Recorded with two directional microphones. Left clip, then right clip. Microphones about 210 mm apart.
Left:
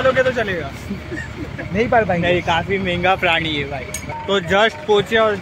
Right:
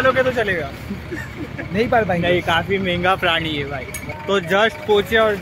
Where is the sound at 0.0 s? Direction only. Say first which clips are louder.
Even; 20° right (ahead or behind).